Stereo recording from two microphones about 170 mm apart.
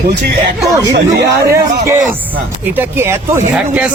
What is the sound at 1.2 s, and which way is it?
Speech, 20° right (ahead or behind).